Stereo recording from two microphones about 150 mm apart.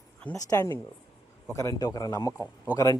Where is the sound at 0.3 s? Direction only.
20° left (ahead or behind).